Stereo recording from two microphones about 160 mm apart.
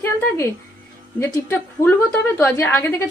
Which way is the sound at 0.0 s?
15° left (ahead or behind).